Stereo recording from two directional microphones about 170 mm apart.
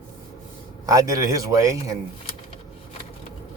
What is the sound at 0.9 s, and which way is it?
A man's voice, 20° right (ahead or behind).